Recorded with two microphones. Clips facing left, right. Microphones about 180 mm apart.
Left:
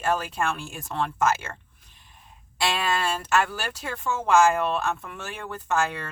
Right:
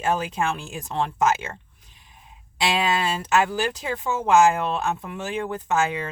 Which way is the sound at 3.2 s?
20° right (ahead or behind).